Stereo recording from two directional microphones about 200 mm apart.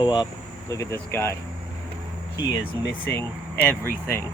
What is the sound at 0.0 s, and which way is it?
Speech, 20° left (ahead or behind).